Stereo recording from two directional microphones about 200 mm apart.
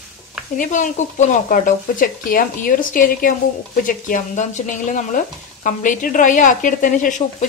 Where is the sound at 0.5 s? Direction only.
40° left (ahead or behind).